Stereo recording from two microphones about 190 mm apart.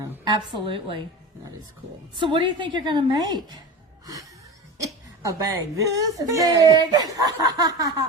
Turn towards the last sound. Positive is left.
turn(degrees=-20)  # may be behind; listen again after turning